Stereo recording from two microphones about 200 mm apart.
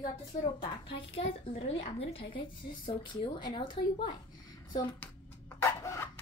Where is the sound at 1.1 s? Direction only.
30° left (ahead or behind).